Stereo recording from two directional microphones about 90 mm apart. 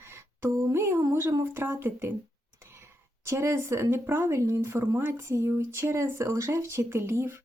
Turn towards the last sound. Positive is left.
turn(degrees=-30)  # may be behind; listen again after turning